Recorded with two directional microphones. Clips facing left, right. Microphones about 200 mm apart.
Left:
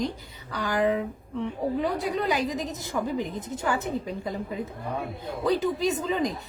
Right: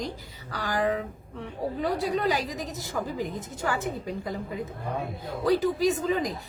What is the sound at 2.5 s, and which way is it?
A woman's voice, 20° left (ahead or behind).